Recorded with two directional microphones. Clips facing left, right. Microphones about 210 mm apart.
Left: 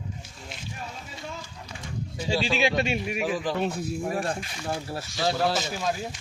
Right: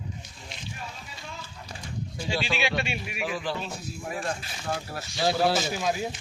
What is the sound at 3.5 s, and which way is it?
Speech, 60° left (ahead or behind).